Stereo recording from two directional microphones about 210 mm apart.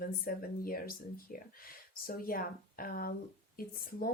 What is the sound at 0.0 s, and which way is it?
Speech, 45° left (ahead or behind).